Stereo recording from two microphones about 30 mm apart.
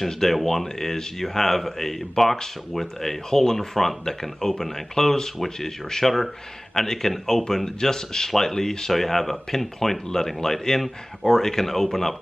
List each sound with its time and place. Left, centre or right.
0.0 s speech: centre